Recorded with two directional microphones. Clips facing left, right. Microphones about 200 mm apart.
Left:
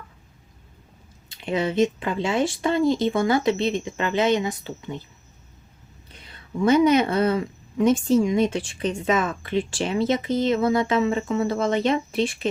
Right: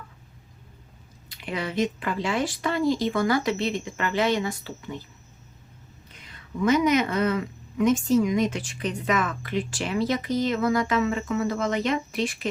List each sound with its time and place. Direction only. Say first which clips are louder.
1.3 s a woman's voice: left 6 dB; 25° left (ahead or behind)
6.1 s a woman's voice: left 3 dB; 30° left (ahead or behind)